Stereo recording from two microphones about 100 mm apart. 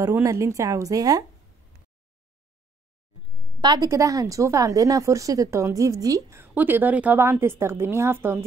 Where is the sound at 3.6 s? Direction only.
50° right (ahead or behind).